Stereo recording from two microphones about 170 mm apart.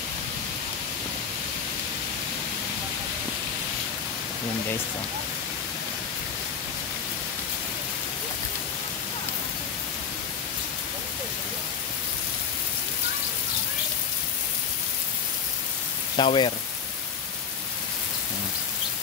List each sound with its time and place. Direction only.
16.2 s speech: 30° left (ahead or behind)